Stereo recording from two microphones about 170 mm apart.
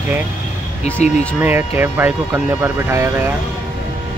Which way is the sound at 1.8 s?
10° right (ahead or behind).